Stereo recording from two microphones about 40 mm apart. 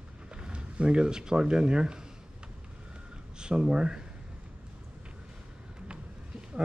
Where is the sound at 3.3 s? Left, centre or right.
Right.